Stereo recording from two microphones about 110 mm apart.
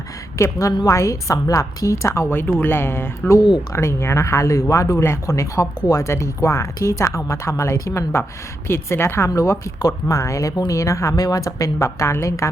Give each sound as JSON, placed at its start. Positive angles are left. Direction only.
{"t": 0.3, "sound": "speech", "side_deg": 25}
{"t": 0.7, "sound": "a woman's voice", "side_deg": 40}
{"t": 0.9, "sound": "speech", "side_deg": 30}